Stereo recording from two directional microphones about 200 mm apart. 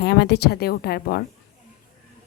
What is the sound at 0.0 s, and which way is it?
Speech, 55° left (ahead or behind).